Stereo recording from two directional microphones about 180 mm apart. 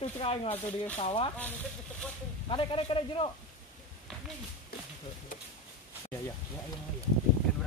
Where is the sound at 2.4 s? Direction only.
30° left (ahead or behind).